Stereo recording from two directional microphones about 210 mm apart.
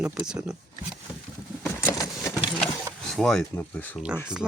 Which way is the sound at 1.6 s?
15° left (ahead or behind).